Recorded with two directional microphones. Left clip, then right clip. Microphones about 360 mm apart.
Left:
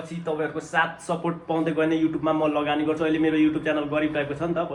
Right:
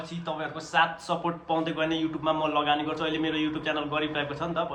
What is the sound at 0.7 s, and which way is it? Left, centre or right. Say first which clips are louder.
A man's voice: right 1 dB; centre.